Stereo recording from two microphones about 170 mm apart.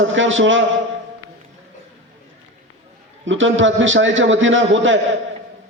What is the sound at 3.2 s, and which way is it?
A man's voice, 90° right.